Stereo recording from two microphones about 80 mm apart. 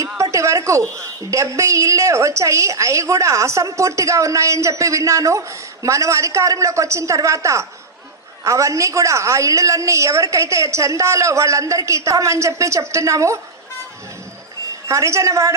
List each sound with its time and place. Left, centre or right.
0.2 s a sound: right
1.3 s a woman's voice: right
14.8 s a woman's voice: right